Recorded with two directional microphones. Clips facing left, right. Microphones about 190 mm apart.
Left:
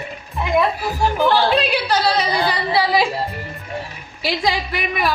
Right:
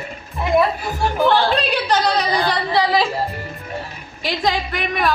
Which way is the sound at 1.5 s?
5° left (ahead or behind).